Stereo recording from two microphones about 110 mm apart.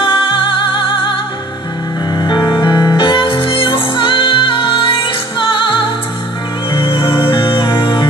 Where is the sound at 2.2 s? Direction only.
40° left (ahead or behind).